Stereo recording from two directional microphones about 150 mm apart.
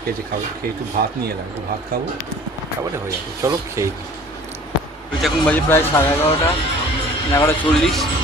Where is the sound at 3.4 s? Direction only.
20° right (ahead or behind).